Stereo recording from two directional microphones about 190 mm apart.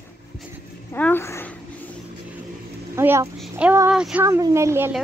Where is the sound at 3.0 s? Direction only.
10° right (ahead or behind).